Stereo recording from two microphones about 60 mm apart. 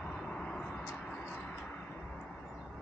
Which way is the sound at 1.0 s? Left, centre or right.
Centre.